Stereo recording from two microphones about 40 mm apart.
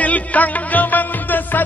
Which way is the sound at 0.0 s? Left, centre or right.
Left.